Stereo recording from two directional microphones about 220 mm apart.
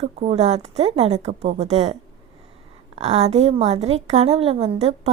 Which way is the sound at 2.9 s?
30° right (ahead or behind).